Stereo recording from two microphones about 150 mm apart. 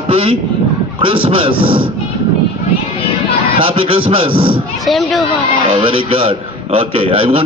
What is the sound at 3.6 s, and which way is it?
A man's voice, 35° right (ahead or behind).